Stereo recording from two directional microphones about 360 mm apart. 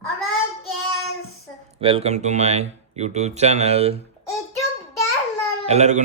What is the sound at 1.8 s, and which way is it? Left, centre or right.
Speech, centre.